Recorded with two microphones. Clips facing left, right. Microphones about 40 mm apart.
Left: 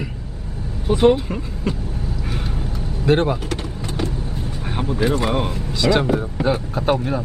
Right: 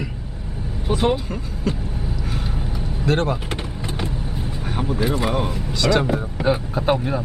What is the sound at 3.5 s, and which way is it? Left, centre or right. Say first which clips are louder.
Vehicle: left 2 dB; centre.